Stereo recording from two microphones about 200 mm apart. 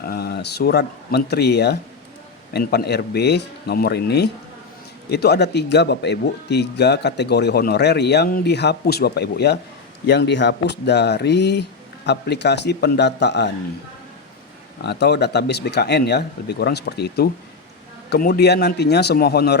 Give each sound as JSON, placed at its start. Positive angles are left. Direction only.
{"t": 0.0, "sound": "a man's voice", "side_deg": 50}
{"t": 14.8, "sound": "speech", "side_deg": 55}